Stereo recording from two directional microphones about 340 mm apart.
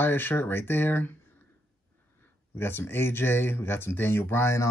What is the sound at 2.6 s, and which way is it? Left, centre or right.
Speech, centre.